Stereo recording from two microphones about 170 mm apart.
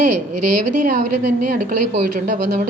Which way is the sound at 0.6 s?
50° right (ahead or behind).